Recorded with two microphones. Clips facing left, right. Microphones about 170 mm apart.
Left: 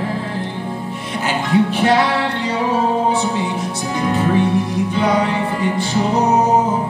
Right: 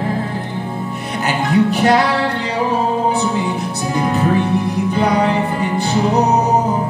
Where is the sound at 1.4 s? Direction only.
40° right (ahead or behind).